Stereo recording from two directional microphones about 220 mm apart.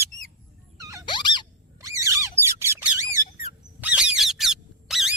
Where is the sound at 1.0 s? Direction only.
20° left (ahead or behind).